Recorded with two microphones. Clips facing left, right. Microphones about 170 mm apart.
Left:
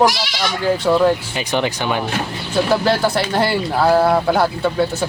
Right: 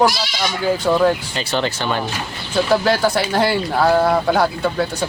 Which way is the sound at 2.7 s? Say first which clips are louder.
Right 1 dB; centre (ahead or behind).